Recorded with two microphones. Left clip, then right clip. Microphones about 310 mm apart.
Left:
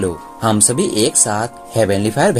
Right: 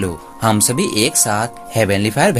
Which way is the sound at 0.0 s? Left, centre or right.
Right.